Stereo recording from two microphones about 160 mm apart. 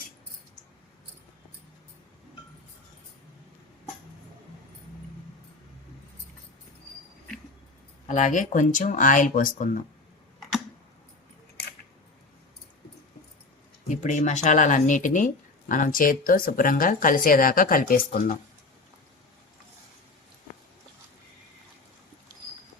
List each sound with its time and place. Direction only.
8.0 s speech: 50° left (ahead or behind)
13.8 s speech: 50° left (ahead or behind)